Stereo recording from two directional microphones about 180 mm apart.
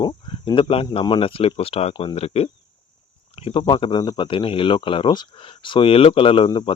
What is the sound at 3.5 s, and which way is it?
Speech, 30° left (ahead or behind).